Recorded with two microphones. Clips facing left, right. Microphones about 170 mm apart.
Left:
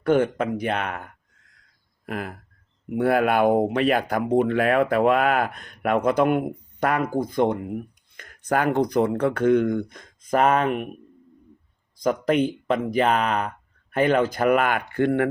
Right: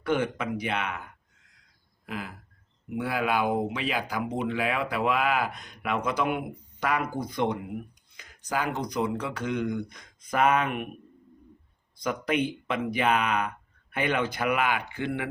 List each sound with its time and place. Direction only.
0.0 s speech: 50° left (ahead or behind)
12.0 s speech: 45° left (ahead or behind)